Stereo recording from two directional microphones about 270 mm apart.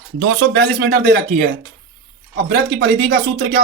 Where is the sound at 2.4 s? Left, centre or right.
Right.